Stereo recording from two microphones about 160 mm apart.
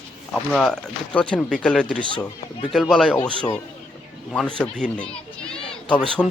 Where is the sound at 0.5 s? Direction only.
5° left (ahead or behind).